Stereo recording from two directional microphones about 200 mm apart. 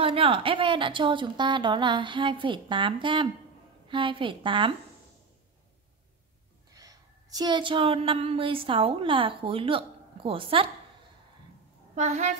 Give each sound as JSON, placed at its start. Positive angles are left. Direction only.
{"t": 0.0, "sound": "a woman's voice", "side_deg": -25}
{"t": 6.7, "sound": "a woman's voice", "side_deg": -20}
{"t": 11.9, "sound": "a woman's voice", "side_deg": -35}